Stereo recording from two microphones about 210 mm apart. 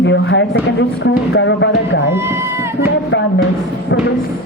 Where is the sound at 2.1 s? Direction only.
10° right (ahead or behind).